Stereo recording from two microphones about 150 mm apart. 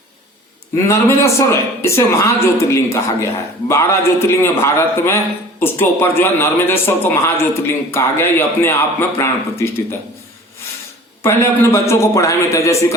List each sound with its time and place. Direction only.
0.8 s a man's voice: 20° left (ahead or behind)
11.2 s speech: 15° left (ahead or behind)